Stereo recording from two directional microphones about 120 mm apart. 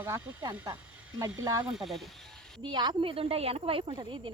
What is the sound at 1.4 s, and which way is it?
Speech, 30° right (ahead or behind).